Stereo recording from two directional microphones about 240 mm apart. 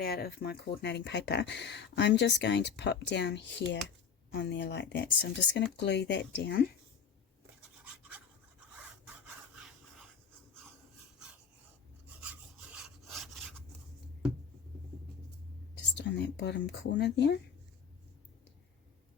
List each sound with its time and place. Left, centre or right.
0.0 s speech: left
8.7 s filing: centre
12.2 s rub: centre
16.0 s speech: left